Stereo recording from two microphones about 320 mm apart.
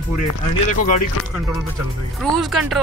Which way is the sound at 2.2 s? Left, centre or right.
Centre.